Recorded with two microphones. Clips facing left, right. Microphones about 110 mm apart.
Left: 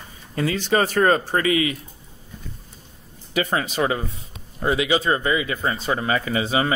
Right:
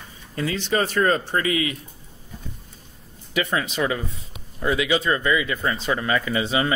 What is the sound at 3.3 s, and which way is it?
Speech, 40° left (ahead or behind).